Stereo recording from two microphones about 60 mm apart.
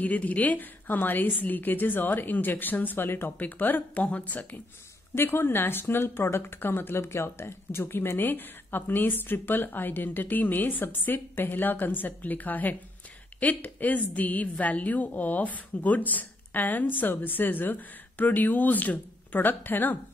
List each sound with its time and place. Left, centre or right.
0.0 s a woman's voice: left
5.1 s a woman's voice: left